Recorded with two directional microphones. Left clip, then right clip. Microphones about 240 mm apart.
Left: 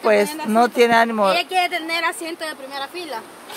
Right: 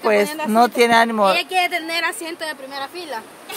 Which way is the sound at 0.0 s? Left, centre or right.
Centre.